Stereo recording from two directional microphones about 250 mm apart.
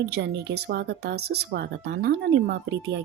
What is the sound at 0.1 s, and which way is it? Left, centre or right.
Speech, right.